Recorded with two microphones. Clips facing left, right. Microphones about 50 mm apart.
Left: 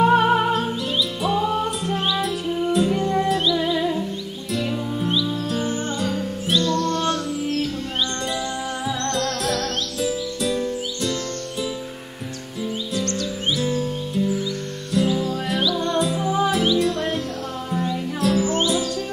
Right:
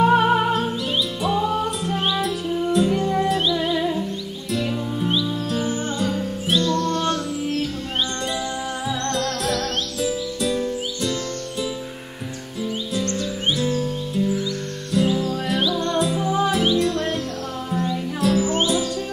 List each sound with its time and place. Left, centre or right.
0.0 s music: centre
8.8 s music: centre
13.0 s music: centre
13.6 s music: centre